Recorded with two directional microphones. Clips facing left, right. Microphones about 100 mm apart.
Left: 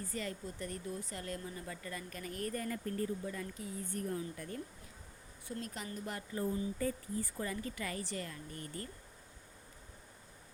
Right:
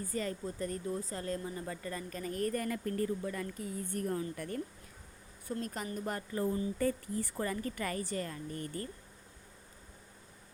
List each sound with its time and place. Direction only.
0.1 s speech: 40° right (ahead or behind)
2.5 s speech: 65° right (ahead or behind)
3.6 s speech: 55° right (ahead or behind)
5.5 s speech: 45° right (ahead or behind)
6.3 s speech: 65° right (ahead or behind); by 8.9 s 40° right (ahead or behind)